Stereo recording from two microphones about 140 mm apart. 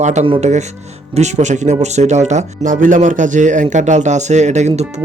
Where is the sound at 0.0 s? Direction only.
55° right (ahead or behind).